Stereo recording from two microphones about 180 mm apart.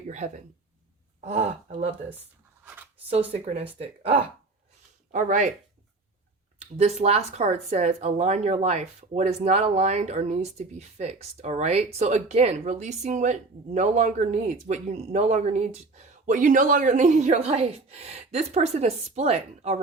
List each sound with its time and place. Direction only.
0.1 s speech: 40° right (ahead or behind)
3.3 s speech: 35° right (ahead or behind)
5.1 s speech: 40° right (ahead or behind)
6.7 s speech: 35° right (ahead or behind)